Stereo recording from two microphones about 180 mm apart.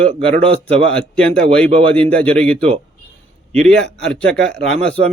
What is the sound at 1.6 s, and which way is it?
Speech, 30° right (ahead or behind).